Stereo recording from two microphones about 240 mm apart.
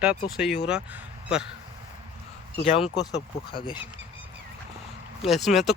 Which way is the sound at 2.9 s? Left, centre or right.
Centre.